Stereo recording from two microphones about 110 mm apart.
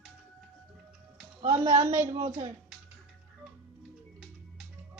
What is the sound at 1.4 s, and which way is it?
Speech, 45° right (ahead or behind).